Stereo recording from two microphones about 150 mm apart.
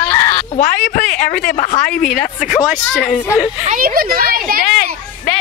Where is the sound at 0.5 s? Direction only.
70° left (ahead or behind).